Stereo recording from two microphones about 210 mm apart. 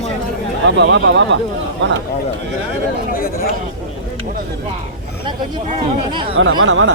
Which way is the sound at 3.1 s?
45° left (ahead or behind).